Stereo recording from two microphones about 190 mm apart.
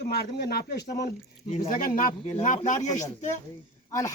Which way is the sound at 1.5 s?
40° left (ahead or behind).